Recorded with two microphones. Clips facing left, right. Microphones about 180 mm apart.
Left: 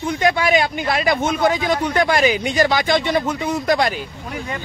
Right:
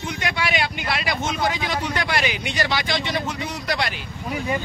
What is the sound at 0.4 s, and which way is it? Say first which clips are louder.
Speech: left 7 dB; 45° left (ahead or behind).